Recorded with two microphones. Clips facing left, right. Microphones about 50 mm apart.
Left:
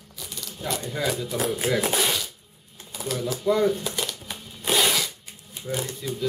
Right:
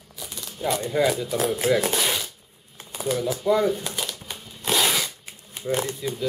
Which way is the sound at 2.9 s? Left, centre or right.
Right.